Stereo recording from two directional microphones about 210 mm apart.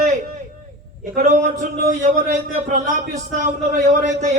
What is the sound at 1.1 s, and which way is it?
A man's voice, 40° right (ahead or behind).